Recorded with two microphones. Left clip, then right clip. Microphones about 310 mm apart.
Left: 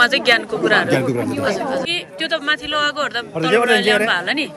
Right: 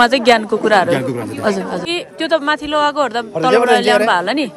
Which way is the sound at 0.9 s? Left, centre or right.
Centre.